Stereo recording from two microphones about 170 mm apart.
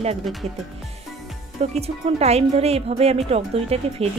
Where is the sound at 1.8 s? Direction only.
40° right (ahead or behind).